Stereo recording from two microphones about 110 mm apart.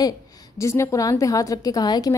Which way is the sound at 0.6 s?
25° left (ahead or behind).